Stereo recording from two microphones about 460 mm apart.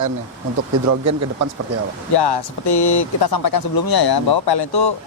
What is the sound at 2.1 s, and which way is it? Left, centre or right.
Speech, left.